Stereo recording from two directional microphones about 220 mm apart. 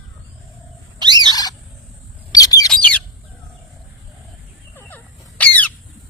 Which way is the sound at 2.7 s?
5° left (ahead or behind).